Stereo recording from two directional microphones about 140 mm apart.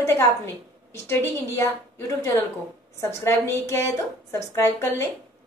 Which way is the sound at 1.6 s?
20° left (ahead or behind).